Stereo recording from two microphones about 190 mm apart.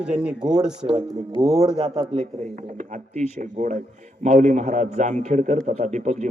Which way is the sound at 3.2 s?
40° right (ahead or behind).